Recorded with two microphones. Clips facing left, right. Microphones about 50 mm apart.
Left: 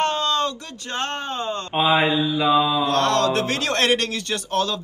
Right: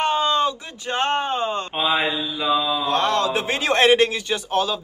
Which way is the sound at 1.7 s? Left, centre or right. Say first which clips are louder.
Left 6 dB; centre.